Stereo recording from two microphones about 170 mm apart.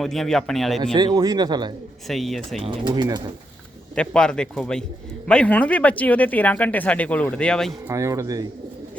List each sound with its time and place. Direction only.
0.0 s speech: centre (ahead or behind)
0.9 s speech: 25° right (ahead or behind)
2.0 s speech: centre (ahead or behind)
2.6 s speech: 25° right (ahead or behind)
3.9 s a man's voice: 5° left (ahead or behind)
7.9 s speech: 20° right (ahead or behind)